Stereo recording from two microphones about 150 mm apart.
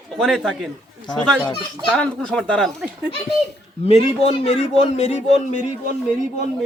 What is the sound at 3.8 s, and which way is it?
A man's voice, 40° left (ahead or behind).